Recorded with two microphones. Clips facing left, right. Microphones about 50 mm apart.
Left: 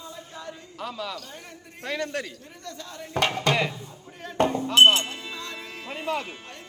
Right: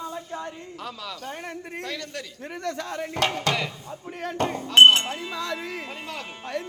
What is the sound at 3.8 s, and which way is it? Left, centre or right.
Speech, right.